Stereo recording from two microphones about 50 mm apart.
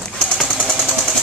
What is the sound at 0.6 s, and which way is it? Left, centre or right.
Jackhammer, centre.